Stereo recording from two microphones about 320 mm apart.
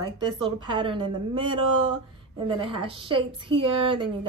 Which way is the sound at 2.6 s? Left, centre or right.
Centre.